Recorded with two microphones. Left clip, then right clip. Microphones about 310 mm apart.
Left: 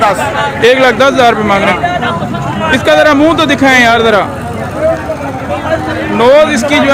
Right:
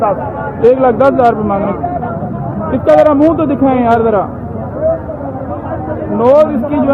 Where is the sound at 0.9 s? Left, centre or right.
Left.